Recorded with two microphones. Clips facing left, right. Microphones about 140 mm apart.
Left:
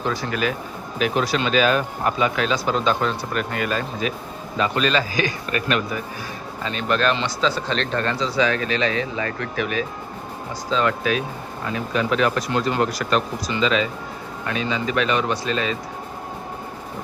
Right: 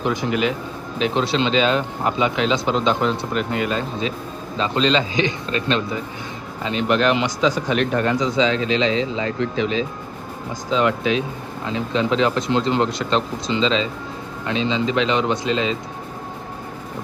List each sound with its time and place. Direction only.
0.0 s speech: 20° right (ahead or behind)